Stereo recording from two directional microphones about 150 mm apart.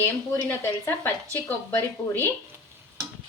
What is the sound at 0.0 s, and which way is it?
A woman's voice, 15° left (ahead or behind).